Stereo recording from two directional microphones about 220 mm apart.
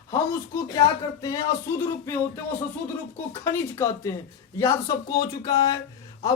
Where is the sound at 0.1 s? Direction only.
15° left (ahead or behind).